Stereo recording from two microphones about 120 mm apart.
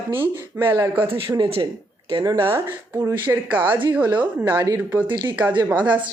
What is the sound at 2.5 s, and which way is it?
Speech, 20° right (ahead or behind).